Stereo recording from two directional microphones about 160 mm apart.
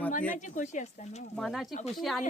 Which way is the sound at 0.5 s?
50° left (ahead or behind).